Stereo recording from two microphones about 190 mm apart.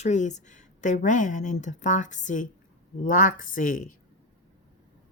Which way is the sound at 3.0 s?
45° left (ahead or behind).